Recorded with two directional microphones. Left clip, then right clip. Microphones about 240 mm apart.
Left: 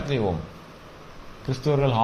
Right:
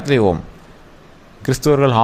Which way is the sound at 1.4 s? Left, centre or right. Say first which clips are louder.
Right 9 dB; right.